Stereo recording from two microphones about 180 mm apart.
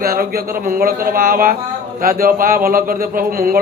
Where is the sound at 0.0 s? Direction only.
55° right (ahead or behind).